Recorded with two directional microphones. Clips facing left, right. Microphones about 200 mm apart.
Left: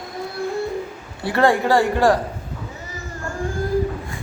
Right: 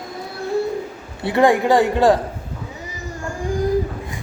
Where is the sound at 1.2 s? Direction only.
20° right (ahead or behind).